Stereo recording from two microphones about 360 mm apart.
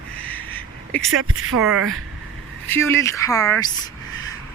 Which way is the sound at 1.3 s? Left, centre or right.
Right.